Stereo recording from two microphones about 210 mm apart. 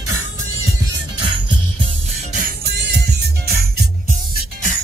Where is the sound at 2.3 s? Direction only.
45° right (ahead or behind).